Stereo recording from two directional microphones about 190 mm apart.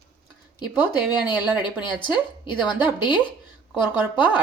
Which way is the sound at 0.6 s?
10° right (ahead or behind).